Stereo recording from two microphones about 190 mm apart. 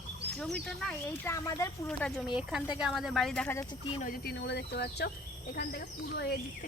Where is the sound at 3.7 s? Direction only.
25° left (ahead or behind).